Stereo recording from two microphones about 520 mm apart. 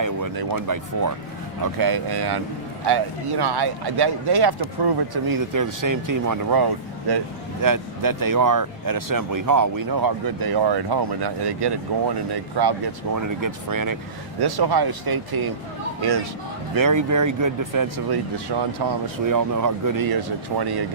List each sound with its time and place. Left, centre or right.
0.0 s speech: right